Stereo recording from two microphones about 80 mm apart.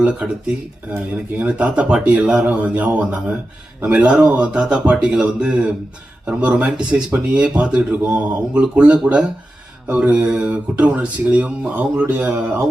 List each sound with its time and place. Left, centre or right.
0.0 s speech: centre